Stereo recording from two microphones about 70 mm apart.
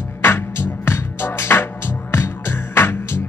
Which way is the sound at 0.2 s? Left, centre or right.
Left.